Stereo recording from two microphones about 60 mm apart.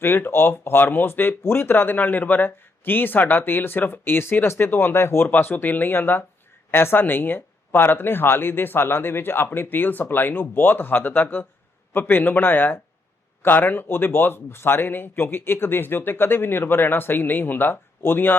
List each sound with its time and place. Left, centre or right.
0.0 s speech: left